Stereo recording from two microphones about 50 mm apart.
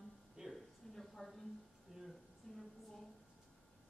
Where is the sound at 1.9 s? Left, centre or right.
Centre.